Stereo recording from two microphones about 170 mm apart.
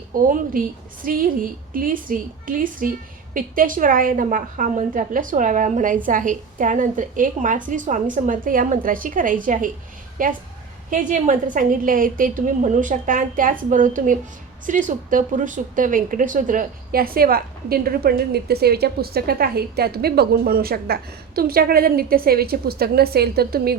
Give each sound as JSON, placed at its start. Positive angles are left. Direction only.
{"t": 0.3, "sound": "a woman's voice", "side_deg": -55}